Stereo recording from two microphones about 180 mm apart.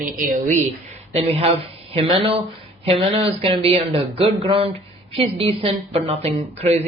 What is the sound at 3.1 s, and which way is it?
Speech, 30° right (ahead or behind).